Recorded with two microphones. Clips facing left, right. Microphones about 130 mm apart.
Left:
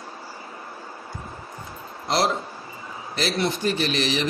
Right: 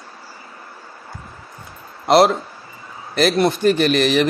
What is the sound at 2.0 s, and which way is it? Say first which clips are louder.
Speech: right 10 dB; 65° right (ahead or behind).